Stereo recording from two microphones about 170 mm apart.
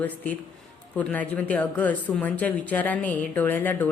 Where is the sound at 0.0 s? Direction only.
10° left (ahead or behind).